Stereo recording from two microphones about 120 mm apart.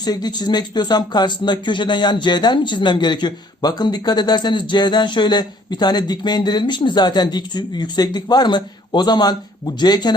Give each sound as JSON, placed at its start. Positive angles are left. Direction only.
{"t": 0.0, "sound": "speech", "side_deg": 35}